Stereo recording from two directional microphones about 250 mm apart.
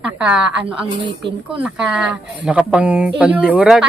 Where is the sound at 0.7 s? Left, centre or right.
Centre.